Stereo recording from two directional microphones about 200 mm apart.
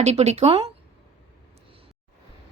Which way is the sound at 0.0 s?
35° right (ahead or behind).